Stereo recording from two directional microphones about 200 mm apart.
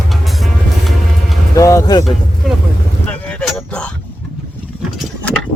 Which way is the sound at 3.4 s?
5° left (ahead or behind).